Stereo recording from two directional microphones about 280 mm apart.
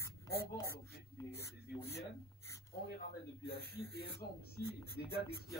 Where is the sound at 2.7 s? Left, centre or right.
Left.